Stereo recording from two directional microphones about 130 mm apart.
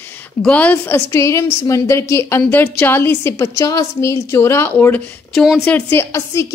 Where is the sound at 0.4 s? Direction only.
10° left (ahead or behind).